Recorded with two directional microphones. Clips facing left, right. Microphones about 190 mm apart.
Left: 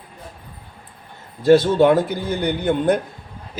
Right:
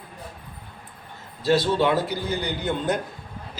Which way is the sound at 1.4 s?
50° left (ahead or behind).